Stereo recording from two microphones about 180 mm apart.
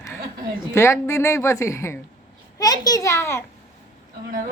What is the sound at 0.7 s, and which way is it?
A child's voice, 15° left (ahead or behind).